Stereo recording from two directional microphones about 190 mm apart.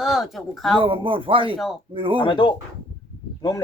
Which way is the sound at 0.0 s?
Centre (ahead or behind).